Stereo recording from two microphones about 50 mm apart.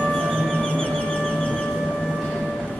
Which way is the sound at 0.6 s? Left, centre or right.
Left.